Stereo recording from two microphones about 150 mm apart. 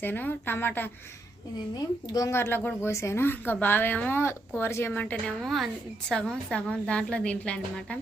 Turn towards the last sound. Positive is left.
turn(degrees=5)  # may be behind; listen again after turning